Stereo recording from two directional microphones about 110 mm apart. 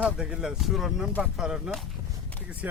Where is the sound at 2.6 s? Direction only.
15° right (ahead or behind).